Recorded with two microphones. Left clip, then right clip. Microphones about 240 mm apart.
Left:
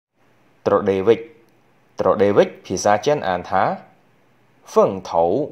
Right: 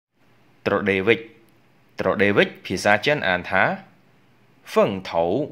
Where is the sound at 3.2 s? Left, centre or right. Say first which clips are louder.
Even; centre.